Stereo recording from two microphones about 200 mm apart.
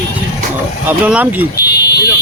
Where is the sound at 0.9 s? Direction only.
5° right (ahead or behind).